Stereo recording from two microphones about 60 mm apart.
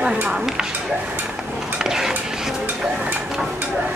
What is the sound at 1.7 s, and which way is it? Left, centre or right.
Stir, centre.